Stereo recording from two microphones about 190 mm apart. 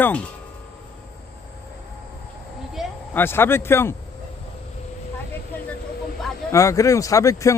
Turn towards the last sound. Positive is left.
turn(degrees=15)  # may be behind; listen again after turning